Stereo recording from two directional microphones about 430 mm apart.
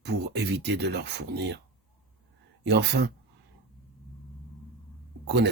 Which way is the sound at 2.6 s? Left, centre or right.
Right.